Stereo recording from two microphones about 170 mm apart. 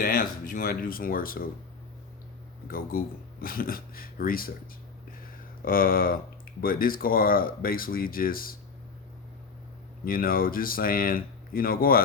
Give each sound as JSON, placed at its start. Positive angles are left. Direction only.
{"t": 0.0, "sound": "speech", "side_deg": 55}
{"t": 2.6, "sound": "speech", "side_deg": 60}
{"t": 5.6, "sound": "speech", "side_deg": 55}
{"t": 10.0, "sound": "speech", "side_deg": 60}